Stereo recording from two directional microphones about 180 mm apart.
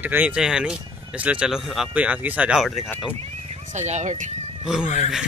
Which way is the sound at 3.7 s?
40° right (ahead or behind).